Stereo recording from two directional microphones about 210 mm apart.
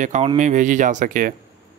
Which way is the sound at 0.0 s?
35° right (ahead or behind).